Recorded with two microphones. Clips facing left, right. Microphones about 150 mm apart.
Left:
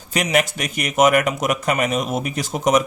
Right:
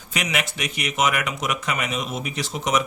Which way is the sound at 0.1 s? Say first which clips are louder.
Left 7 dB; 40° left (ahead or behind).